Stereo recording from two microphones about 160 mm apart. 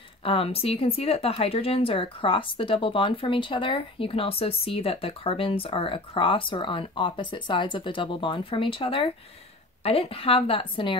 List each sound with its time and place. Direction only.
0.2 s speech: 35° left (ahead or behind)